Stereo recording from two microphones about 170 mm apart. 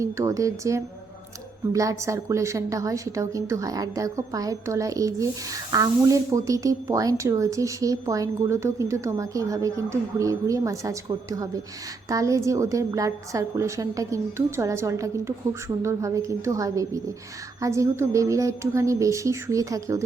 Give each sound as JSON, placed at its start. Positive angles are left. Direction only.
{"t": 0.0, "sound": "a woman's voice", "side_deg": -20}